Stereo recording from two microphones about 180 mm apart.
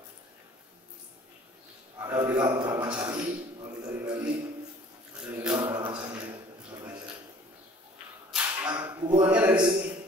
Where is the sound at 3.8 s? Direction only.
25° right (ahead or behind).